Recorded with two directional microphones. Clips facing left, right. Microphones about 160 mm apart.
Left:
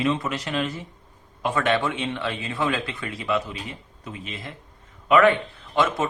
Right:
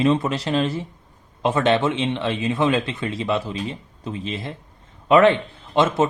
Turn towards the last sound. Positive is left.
turn(degrees=-25)  # may be behind; listen again after turning